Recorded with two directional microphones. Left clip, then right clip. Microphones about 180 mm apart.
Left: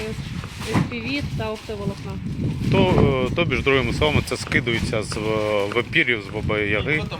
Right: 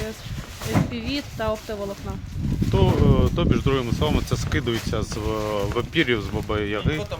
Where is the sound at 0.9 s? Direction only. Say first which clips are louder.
Left 1 dB; 30° right (ahead or behind).